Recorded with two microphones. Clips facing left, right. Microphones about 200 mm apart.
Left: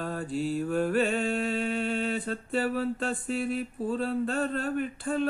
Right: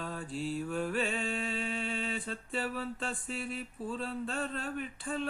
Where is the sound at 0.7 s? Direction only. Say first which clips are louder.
Left 9 dB; 40° left (ahead or behind).